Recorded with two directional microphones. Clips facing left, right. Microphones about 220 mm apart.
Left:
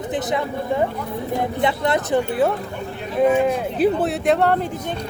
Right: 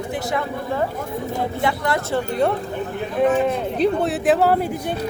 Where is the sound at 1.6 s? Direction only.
20° left (ahead or behind).